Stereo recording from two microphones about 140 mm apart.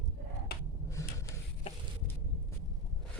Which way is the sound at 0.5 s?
90° left.